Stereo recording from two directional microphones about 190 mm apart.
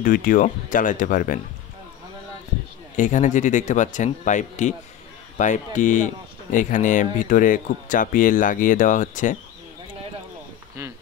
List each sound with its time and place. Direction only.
0.0 s speech: 45° left (ahead or behind)
3.0 s speech: 40° left (ahead or behind)